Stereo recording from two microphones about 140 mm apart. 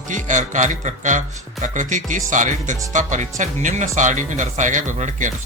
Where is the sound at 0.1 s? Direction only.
65° right (ahead or behind).